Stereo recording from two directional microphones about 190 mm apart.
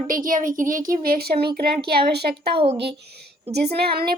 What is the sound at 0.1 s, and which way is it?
A woman's voice, 45° right (ahead or behind).